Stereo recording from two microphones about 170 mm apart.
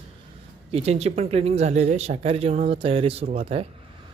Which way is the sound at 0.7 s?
40° right (ahead or behind).